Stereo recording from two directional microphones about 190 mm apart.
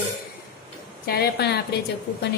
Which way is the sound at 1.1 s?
55° left (ahead or behind).